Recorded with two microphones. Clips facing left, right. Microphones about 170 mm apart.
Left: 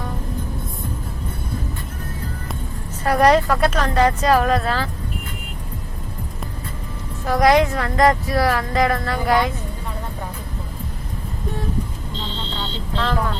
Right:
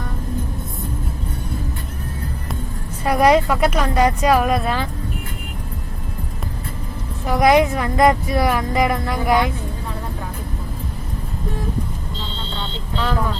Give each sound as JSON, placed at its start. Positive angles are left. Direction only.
{"t": 3.0, "sound": "speech", "side_deg": -10}
{"t": 7.3, "sound": "speech", "side_deg": -15}
{"t": 13.0, "sound": "speech", "side_deg": -5}